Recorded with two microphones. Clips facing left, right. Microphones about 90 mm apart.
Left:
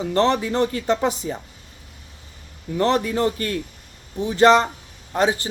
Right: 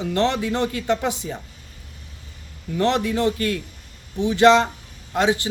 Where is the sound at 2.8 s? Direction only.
40° left (ahead or behind).